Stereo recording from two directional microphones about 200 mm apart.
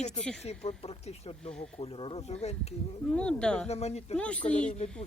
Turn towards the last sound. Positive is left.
turn(degrees=35)  # may be behind; listen again after turning